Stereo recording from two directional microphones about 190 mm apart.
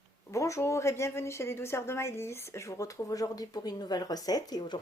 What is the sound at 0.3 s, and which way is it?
A woman's voice, 15° left (ahead or behind).